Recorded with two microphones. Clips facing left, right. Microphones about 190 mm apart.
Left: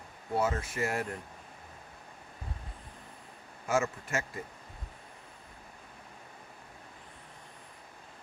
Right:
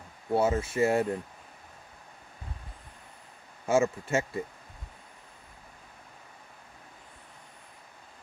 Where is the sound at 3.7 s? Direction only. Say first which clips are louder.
Right 5 dB; 25° right (ahead or behind).